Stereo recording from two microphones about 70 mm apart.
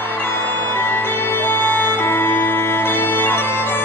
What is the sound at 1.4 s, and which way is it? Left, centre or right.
Music, left.